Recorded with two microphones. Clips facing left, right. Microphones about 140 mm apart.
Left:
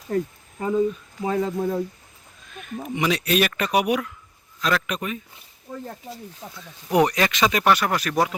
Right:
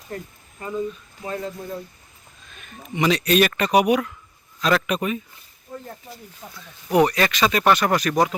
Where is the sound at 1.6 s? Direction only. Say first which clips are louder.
Left 8 dB; 90° left.